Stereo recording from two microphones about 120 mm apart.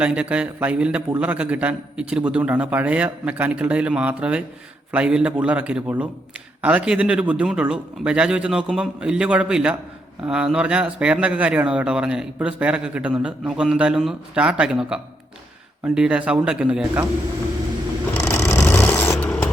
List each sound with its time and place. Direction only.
0.0 s a man's voice: 10° right (ahead or behind)
18.2 s vehicle: 20° left (ahead or behind)